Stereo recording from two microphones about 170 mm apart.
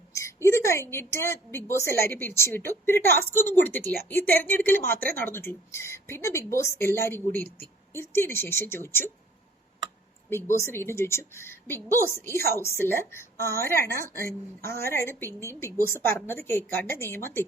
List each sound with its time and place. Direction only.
0.1 s a woman's voice: 15° left (ahead or behind)
10.2 s speech: 15° left (ahead or behind)